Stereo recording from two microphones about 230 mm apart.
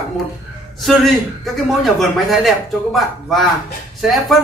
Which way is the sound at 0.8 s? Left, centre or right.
Centre.